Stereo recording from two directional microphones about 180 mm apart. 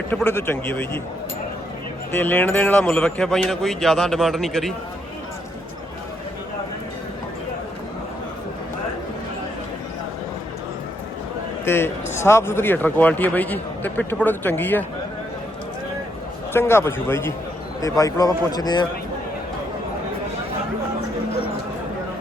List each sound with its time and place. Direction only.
0.1 s a man's voice: 10° left (ahead or behind)
2.1 s a man's voice: 10° left (ahead or behind)
11.6 s a man's voice: 15° left (ahead or behind)
16.5 s a man's voice: 15° left (ahead or behind)